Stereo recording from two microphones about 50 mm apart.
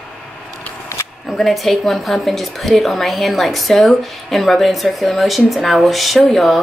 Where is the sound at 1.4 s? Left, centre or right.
Centre.